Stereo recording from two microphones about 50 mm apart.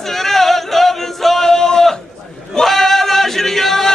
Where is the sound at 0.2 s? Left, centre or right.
Centre.